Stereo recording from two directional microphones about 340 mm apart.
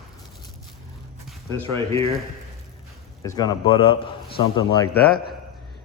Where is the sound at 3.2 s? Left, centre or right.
Centre.